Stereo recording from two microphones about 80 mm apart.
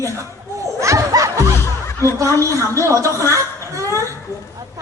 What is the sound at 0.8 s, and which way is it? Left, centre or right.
Snicker, right.